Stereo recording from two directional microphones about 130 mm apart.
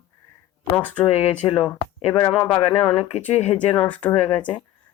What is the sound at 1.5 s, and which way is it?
Speech, 40° left (ahead or behind).